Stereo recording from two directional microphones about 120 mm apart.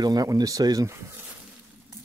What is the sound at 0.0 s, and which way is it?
Speech, 30° right (ahead or behind).